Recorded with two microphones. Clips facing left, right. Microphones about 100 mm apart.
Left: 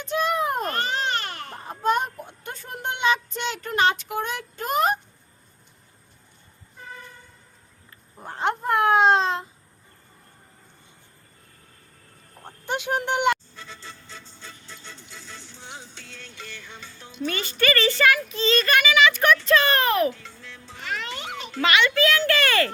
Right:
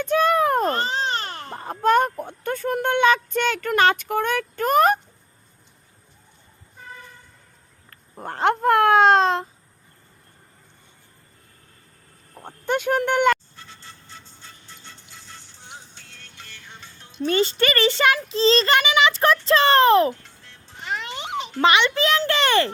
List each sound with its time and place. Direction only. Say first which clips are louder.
0.1 s a sound: right 5 dB; 55° right (ahead or behind)
0.6 s baby cry: right 3 dB; 30° right (ahead or behind)
1.8 s speech: right 5 dB; 50° right (ahead or behind)
8.2 s speech: right 6 dB; 60° right (ahead or behind)
9.1 s a child's voice: right 4 dB; 40° right (ahead or behind)
12.6 s speech: right 5 dB; 50° right (ahead or behind)
14.3 s music: left 3 dB; 90° left
17.2 s a child's voice: right 4 dB; 30° right (ahead or behind)
20.1 s music: left 6 dB; 90° left
20.8 s music: right 2 dB; 20° right (ahead or behind)
21.6 s a child's voice: right 2 dB; 25° right (ahead or behind)